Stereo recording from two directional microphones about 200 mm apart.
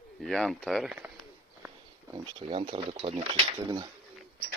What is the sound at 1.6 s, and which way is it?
Speech, 15° right (ahead or behind).